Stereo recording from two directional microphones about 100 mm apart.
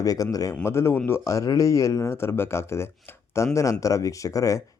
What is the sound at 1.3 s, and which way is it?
Speech, 35° left (ahead or behind).